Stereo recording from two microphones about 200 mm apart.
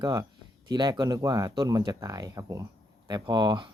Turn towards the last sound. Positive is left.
turn(degrees=-20)  # may be behind; listen again after turning